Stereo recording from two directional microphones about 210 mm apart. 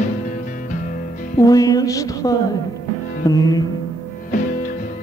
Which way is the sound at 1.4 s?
15° left (ahead or behind).